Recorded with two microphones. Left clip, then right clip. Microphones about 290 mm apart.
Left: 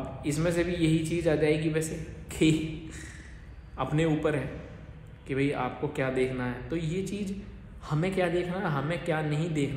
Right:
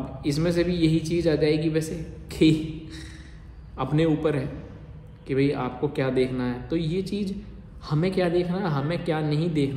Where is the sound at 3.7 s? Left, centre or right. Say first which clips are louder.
Right 4 dB; centre.